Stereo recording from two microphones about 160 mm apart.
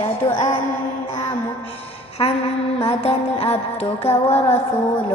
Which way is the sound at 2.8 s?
35° left (ahead or behind).